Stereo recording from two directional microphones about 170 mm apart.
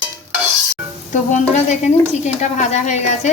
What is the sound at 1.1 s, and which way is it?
Speech, 45° left (ahead or behind).